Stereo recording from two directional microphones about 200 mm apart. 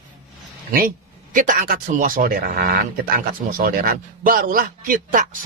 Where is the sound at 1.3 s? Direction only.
40° right (ahead or behind).